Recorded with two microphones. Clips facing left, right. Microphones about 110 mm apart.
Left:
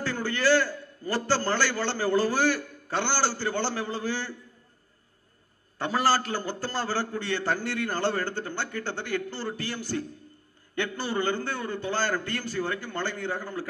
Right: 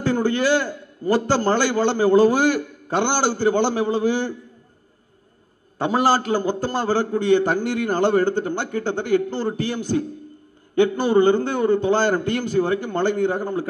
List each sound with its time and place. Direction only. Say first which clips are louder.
0.0 s a man's voice: right 7 dB; 15° right (ahead or behind)
5.8 s a man's voice: right 6 dB; 15° right (ahead or behind)